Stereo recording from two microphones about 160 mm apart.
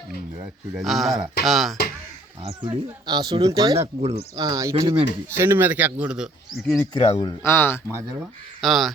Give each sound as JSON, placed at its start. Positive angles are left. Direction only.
{"t": 0.7, "sound": "speech", "side_deg": 0}
{"t": 2.4, "sound": "speech", "side_deg": -35}
{"t": 3.8, "sound": "speech", "side_deg": -40}
{"t": 4.4, "sound": "speech", "side_deg": -20}
{"t": 5.4, "sound": "speech", "side_deg": -15}
{"t": 6.9, "sound": "speech", "side_deg": 25}
{"t": 7.9, "sound": "speech", "side_deg": -15}
{"t": 8.6, "sound": "speech", "side_deg": 0}